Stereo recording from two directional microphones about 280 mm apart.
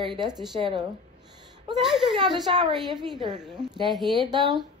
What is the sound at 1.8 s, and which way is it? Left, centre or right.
Speech, centre.